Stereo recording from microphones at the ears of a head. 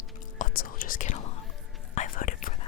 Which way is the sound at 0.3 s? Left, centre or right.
Left.